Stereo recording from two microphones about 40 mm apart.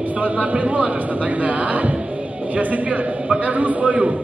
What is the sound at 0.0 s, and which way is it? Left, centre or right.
A man's voice, right.